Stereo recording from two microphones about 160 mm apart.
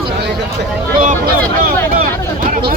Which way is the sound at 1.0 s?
60° right (ahead or behind).